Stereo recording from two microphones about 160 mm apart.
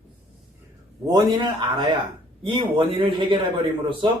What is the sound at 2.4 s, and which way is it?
A man's voice, 30° right (ahead or behind).